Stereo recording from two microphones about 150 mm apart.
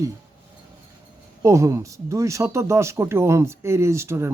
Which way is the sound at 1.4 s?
20° right (ahead or behind).